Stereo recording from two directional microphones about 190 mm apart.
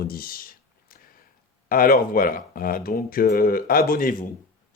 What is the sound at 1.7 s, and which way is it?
Speech, 50° left (ahead or behind).